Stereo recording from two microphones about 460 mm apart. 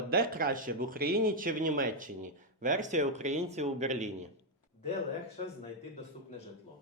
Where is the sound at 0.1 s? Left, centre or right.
Centre.